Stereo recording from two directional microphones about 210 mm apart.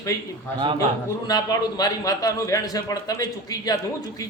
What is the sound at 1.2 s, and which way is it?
A man's voice, 20° left (ahead or behind).